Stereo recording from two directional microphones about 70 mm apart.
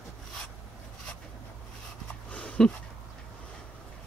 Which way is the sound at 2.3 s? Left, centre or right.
Centre.